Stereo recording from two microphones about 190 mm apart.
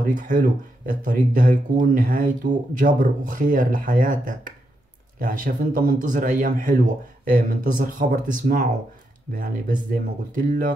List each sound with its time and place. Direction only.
0.0 s speech: 40° right (ahead or behind)